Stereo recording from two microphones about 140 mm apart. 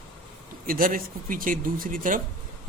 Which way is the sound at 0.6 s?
85° right.